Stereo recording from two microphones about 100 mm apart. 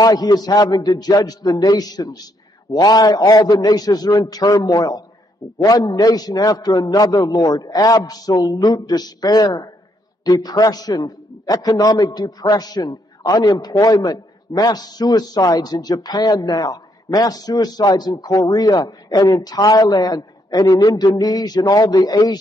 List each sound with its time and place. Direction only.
0.0 s a man's voice: 40° left (ahead or behind)